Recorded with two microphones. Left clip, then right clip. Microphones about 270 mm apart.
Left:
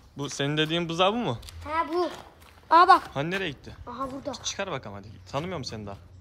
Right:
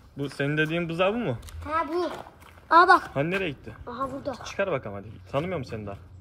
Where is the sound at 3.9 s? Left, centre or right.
Left.